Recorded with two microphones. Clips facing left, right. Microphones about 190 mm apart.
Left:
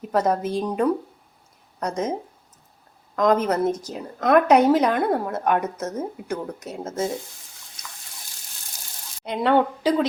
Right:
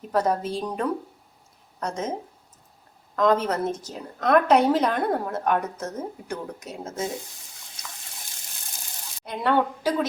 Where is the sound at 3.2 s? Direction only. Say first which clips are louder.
Left 2 dB; 15° left (ahead or behind).